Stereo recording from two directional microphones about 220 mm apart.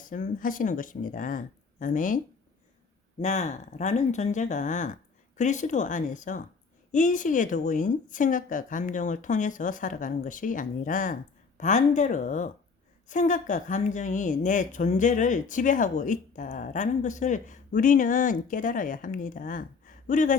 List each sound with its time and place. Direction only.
0.0 s a woman's voice: 35° left (ahead or behind)
3.2 s a woman's voice: 30° left (ahead or behind)